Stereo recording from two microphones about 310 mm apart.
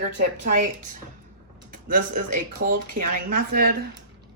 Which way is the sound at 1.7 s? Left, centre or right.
Right.